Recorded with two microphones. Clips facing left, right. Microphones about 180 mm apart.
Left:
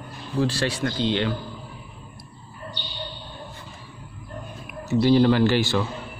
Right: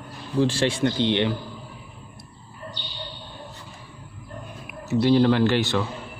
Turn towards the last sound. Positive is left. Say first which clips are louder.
# left 1 dB
turn(degrees=0)  # may be behind; listen again after turning